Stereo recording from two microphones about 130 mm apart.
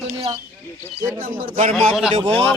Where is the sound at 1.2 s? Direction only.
90° right.